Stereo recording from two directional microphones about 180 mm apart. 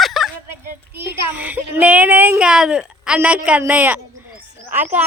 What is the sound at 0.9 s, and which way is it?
A woman's voice, 10° right (ahead or behind).